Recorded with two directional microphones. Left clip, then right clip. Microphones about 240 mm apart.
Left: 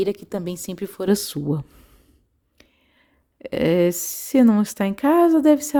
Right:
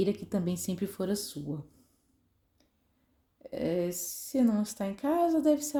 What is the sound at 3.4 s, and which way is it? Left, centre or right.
A woman's voice, left.